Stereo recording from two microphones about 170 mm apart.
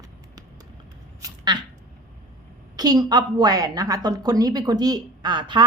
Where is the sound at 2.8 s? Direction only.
25° right (ahead or behind).